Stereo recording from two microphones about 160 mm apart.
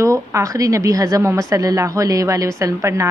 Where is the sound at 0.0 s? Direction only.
20° right (ahead or behind).